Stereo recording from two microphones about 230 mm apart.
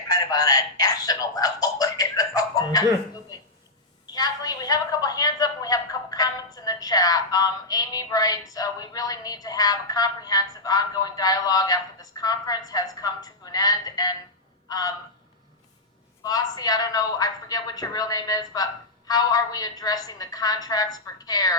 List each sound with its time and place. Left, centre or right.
0.1 s a woman's voice: centre
16.2 s a woman's voice: centre